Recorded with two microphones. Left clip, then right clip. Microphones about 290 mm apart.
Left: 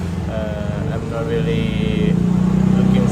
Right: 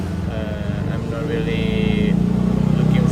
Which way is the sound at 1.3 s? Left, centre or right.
Centre.